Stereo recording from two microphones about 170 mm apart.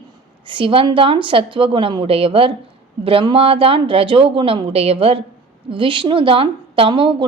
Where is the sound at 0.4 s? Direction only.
30° right (ahead or behind).